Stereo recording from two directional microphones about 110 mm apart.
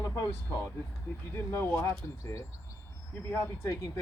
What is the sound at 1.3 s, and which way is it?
Speech, 20° left (ahead or behind).